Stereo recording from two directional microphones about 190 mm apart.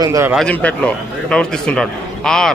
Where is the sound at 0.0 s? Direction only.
15° right (ahead or behind).